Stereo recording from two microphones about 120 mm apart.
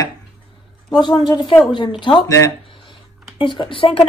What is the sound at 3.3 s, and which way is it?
Speech, 40° left (ahead or behind).